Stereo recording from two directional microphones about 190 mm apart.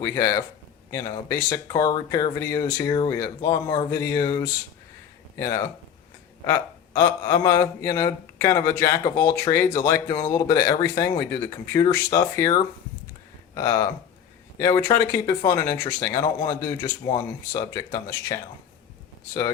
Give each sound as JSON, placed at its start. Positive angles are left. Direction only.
{"t": 0.0, "sound": "speech", "side_deg": 15}